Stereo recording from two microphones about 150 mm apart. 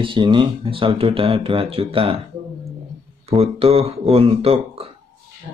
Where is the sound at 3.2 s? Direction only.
40° right (ahead or behind).